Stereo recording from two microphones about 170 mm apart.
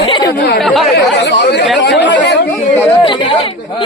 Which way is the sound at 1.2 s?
90° left.